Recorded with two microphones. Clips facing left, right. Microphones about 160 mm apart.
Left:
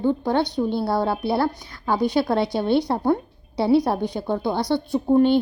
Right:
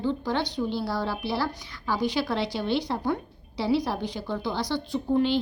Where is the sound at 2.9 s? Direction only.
35° left (ahead or behind).